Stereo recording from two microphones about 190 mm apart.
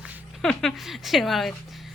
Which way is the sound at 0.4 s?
Centre (ahead or behind).